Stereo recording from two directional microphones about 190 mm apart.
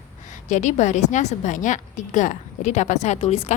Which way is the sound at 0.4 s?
40° left (ahead or behind).